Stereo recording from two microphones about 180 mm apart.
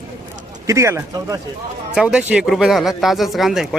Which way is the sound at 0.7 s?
15° right (ahead or behind).